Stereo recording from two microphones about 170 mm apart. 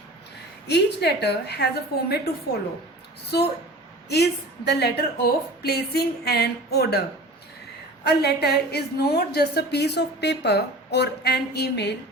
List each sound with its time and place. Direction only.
0.7 s a woman's voice: 80° left
3.3 s a woman's voice: 70° left (ahead or behind)
8.0 s a woman's voice: 75° left (ahead or behind)